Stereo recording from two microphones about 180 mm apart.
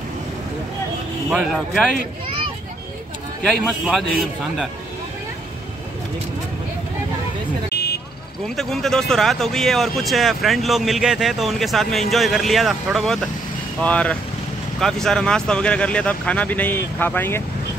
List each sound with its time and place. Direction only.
1.3 s speech: 5° right (ahead or behind)
3.6 s speech: centre (ahead or behind)
7.7 s vehicle: 60° left (ahead or behind)
8.5 s speech: centre (ahead or behind)